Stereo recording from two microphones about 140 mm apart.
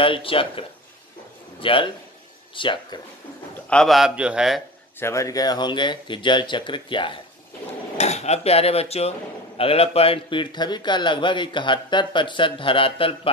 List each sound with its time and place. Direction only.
0.0 s a man's voice: 40° left (ahead or behind)
3.7 s a man's voice: centre (ahead or behind)
4.9 s a man's voice: 20° left (ahead or behind); by 7.2 s 35° left (ahead or behind)
8.0 s a man's voice: 50° left (ahead or behind)